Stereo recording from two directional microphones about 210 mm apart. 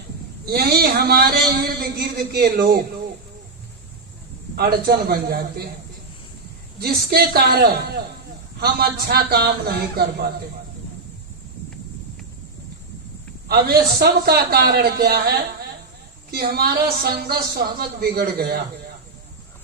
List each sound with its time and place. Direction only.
0.4 s a man's voice: 45° right (ahead or behind)
4.5 s a man's voice: 50° right (ahead or behind)
6.7 s a man's voice: 45° right (ahead or behind)
13.5 s a man's voice: 45° right (ahead or behind)
16.3 s a man's voice: 45° right (ahead or behind)